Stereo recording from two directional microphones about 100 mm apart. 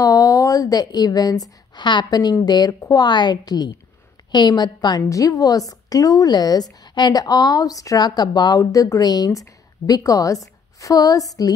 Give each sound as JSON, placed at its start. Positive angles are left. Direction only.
{"t": 0.0, "sound": "a woman's voice", "side_deg": 35}